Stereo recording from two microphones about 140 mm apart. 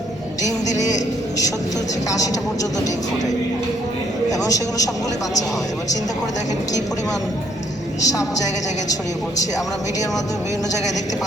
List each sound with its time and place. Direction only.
2.0 s a man's voice: 25° left (ahead or behind)
4.3 s a man's voice: 25° left (ahead or behind)
8.0 s a man's voice: 25° left (ahead or behind)